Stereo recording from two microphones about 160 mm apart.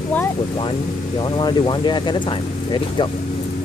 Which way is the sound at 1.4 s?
30° left (ahead or behind).